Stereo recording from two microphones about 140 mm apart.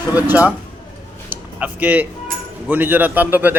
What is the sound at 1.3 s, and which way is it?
Music, 10° right (ahead or behind).